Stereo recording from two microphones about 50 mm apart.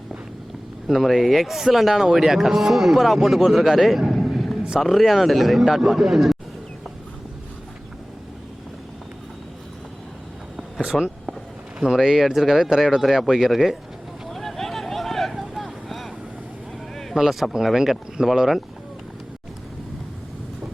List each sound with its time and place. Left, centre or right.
0.9 s a man's voice: centre
4.2 s a sound: centre
4.8 s a man's voice: centre
10.9 s speech: centre
11.8 s a man's voice: centre
14.3 s vehicle: centre
17.2 s a man's voice: centre